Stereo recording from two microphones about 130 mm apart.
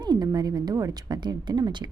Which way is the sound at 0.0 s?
30° right (ahead or behind).